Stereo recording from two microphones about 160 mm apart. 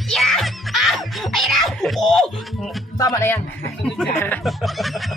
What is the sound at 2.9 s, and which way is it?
Speech, 20° left (ahead or behind).